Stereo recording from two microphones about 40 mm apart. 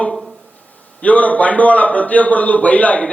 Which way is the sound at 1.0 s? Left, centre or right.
Left.